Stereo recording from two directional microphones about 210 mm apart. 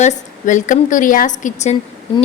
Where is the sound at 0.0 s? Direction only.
35° left (ahead or behind).